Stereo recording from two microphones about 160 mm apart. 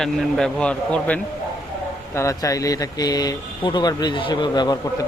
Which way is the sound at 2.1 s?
20° left (ahead or behind).